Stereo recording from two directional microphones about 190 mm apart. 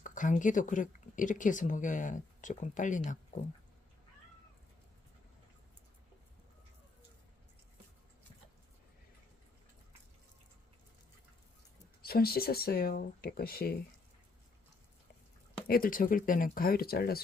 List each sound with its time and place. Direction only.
0.0 s speech: 45° left (ahead or behind)
12.0 s speech: 55° left (ahead or behind)
15.6 s speech: 50° left (ahead or behind)